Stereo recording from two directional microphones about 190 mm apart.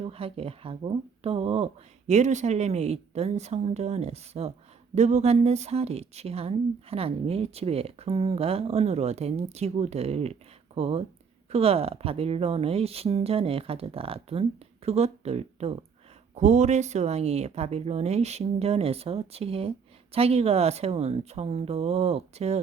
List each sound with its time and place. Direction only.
0.0 s speech: 30° right (ahead or behind)